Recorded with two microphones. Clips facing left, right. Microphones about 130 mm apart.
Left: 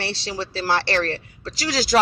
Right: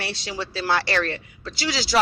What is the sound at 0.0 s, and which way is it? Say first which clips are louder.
Speech: left 2 dB; 30° left (ahead or behind).